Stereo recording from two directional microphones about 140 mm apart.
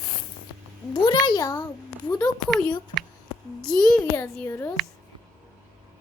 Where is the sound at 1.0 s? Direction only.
25° left (ahead or behind).